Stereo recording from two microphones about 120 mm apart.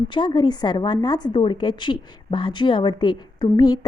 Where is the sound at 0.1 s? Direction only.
40° left (ahead or behind).